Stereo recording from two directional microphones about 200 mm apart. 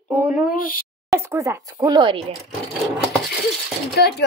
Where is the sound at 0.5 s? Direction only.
45° left (ahead or behind).